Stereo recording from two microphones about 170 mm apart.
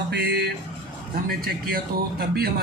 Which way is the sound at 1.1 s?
60° right (ahead or behind).